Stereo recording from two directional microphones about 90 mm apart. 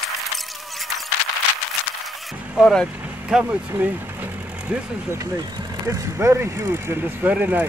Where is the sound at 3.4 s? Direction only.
20° right (ahead or behind).